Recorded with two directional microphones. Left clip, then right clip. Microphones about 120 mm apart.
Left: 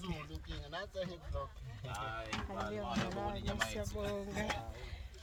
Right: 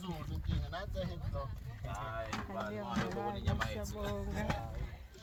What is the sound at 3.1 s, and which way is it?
Speech, 50° left (ahead or behind).